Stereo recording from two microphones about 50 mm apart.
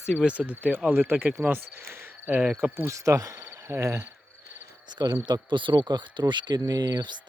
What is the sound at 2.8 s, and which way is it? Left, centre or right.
Speech, right.